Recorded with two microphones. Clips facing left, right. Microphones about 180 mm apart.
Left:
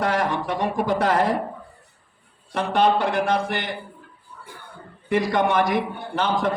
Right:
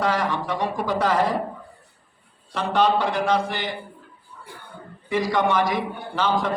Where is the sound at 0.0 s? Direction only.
55° left (ahead or behind).